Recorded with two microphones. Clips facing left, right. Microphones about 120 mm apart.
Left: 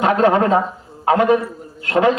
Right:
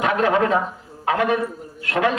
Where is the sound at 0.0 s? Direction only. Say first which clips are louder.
Left 4 dB; 30° left (ahead or behind).